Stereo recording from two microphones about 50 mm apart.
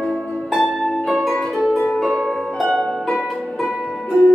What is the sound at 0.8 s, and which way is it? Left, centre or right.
Music, centre.